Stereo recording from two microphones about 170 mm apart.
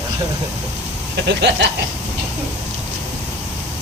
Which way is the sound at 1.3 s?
90° right.